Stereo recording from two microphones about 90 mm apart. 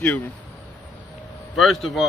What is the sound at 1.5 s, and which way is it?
Speech, 5° left (ahead or behind).